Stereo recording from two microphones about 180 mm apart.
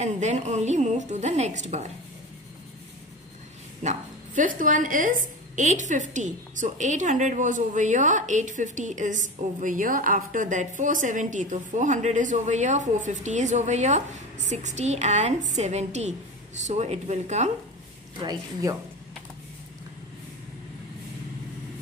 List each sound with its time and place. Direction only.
0.0 s a woman's voice: 40° right (ahead or behind)
3.8 s a woman's voice: 40° right (ahead or behind)
18.2 s speech: 20° right (ahead or behind)